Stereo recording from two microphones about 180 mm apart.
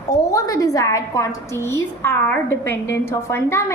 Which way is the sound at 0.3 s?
20° left (ahead or behind).